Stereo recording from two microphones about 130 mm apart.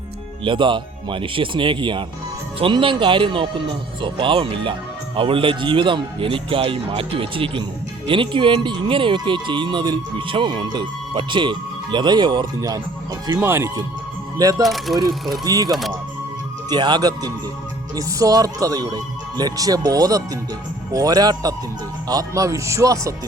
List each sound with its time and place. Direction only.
0.4 s speech: 40° right (ahead or behind)
13.2 s speech: 20° right (ahead or behind)
14.6 s speech: centre (ahead or behind)
15.4 s speech: 30° right (ahead or behind)